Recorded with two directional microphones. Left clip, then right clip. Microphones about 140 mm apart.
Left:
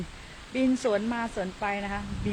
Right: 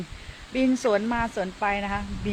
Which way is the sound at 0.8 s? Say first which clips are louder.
Right 4 dB; 25° right (ahead or behind).